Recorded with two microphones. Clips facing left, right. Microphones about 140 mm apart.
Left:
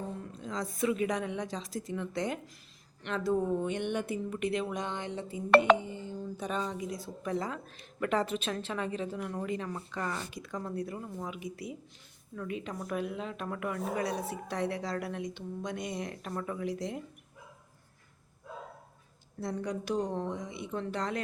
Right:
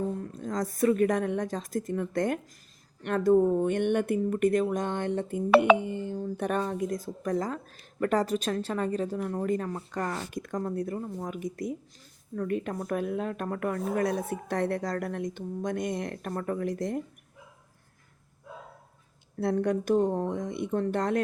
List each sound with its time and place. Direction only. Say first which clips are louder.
0.2 s speech: right 6 dB; 45° right (ahead or behind)
19.4 s speech: right 8 dB; 60° right (ahead or behind)